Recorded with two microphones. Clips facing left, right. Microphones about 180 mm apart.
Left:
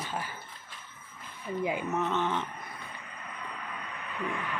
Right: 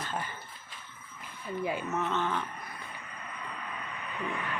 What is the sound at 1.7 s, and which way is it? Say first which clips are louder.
Speech: left 1 dB; 15° left (ahead or behind).